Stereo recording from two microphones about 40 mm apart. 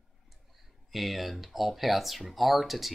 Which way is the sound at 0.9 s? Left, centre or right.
Centre.